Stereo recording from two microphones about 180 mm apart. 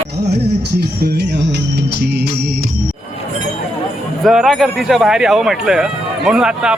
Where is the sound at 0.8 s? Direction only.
70° right (ahead or behind).